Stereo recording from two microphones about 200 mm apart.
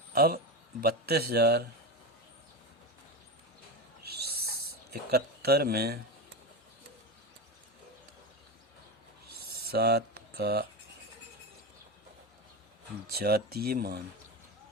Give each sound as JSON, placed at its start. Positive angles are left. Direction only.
{"t": 0.1, "sound": "a man's voice", "side_deg": -50}
{"t": 4.0, "sound": "owl", "side_deg": -50}
{"t": 5.1, "sound": "a man's voice", "side_deg": -50}
{"t": 9.6, "sound": "speech", "side_deg": -55}
{"t": 13.1, "sound": "a man's voice", "side_deg": -50}